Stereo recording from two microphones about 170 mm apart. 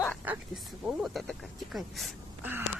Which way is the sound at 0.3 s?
5° right (ahead or behind).